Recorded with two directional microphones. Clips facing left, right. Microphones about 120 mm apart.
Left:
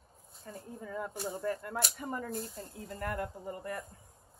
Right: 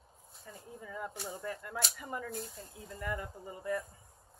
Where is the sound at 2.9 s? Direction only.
65° left (ahead or behind).